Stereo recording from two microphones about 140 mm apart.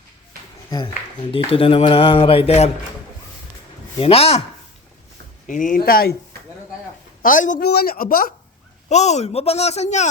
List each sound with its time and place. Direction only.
1.3 s speech: 40° left (ahead or behind)
4.0 s speech: 45° left (ahead or behind)
5.5 s speech: 70° left (ahead or behind); by 6.1 s 90° left
7.2 s a woman's voice: 70° left (ahead or behind); by 8.3 s 90° left
8.9 s speech: 55° left (ahead or behind)